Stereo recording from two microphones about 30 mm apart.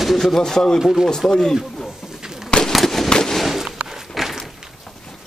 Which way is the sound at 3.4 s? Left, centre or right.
Centre.